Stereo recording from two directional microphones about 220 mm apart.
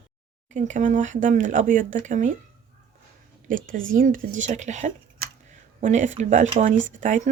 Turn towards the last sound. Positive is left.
turn(degrees=-35)  # may be behind; listen again after turning